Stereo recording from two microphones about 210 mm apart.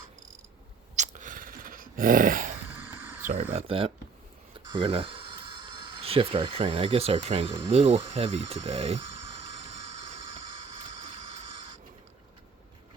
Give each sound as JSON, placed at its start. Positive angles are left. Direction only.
{"t": 0.9, "sound": "dog", "side_deg": -35}
{"t": 2.7, "sound": "a sound", "side_deg": -10}
{"t": 3.5, "sound": "speech", "side_deg": -25}